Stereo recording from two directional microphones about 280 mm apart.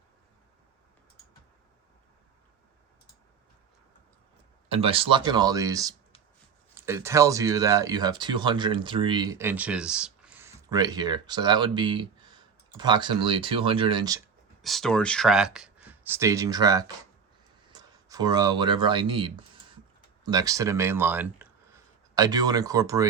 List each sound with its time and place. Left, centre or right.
4.7 s speech: centre
14.6 s speech: centre